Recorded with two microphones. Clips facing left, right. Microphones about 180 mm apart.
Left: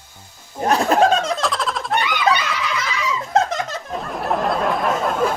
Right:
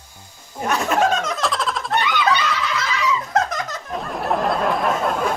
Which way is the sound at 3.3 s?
25° left (ahead or behind).